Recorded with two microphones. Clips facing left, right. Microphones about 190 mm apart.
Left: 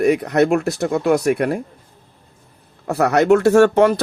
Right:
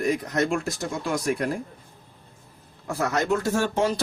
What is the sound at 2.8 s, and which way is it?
Speech, 70° left (ahead or behind).